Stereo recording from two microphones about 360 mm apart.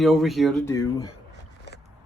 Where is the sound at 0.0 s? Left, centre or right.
Centre.